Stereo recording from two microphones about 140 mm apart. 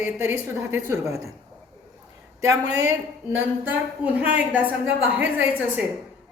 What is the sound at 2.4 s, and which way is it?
Speech, 25° right (ahead or behind).